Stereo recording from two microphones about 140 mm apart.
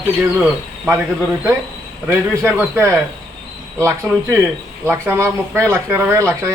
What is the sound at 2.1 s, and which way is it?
Speech, 10° right (ahead or behind).